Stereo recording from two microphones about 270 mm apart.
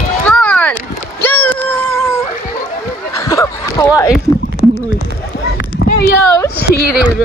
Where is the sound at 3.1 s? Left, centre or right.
Centre.